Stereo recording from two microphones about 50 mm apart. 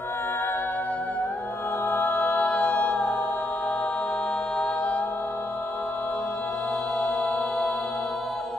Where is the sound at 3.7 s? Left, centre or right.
Left.